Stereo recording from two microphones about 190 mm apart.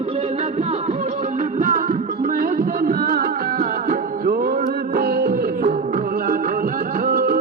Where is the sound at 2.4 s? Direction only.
50° right (ahead or behind).